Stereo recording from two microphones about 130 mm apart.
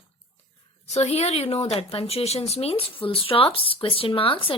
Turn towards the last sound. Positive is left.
turn(degrees=45)  # may be behind; listen again after turning